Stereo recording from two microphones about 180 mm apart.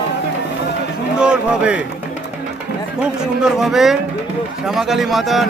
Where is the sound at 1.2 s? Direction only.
5° right (ahead or behind).